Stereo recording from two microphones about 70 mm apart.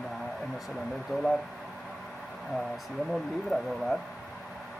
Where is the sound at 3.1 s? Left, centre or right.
Centre.